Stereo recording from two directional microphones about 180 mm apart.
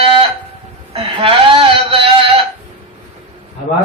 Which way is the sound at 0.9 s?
30° right (ahead or behind).